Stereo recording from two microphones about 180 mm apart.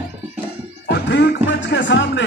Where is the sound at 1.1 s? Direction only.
75° left (ahead or behind).